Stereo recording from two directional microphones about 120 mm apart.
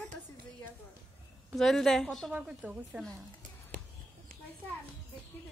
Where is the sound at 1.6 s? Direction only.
5° left (ahead or behind).